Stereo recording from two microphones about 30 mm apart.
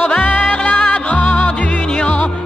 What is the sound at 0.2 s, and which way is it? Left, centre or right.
Music, left.